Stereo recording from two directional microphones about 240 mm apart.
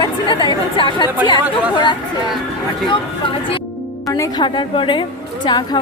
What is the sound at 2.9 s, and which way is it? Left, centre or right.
A woman's voice, left.